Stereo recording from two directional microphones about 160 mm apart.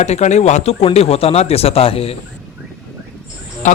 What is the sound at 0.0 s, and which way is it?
Speech, 45° left (ahead or behind).